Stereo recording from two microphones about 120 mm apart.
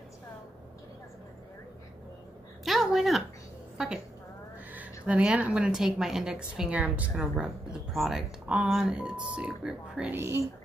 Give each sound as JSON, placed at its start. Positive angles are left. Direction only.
{"t": 2.6, "sound": "a woman's voice", "side_deg": 0}
{"t": 3.7, "sound": "a sound", "side_deg": -5}
{"t": 4.7, "sound": "a woman's voice", "side_deg": -10}
{"t": 10.1, "sound": "a woman's voice", "side_deg": -20}